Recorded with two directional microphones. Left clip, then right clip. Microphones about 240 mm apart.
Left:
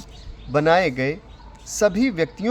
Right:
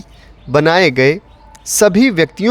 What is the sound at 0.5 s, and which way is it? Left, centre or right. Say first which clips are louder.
Speech: right 7 dB; right.